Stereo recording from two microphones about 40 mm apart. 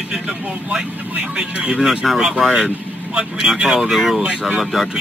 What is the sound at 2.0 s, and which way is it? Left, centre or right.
Speech, centre.